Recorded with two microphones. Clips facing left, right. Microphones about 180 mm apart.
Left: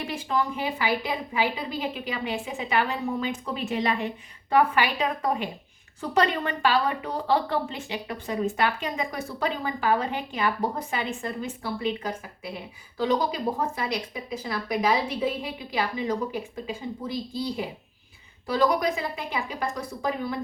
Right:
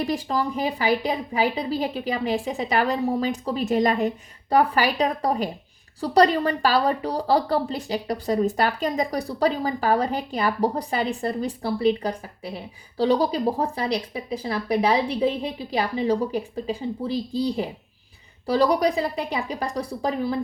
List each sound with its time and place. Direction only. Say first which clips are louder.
0.0 s speech: right 3 dB; 35° right (ahead or behind)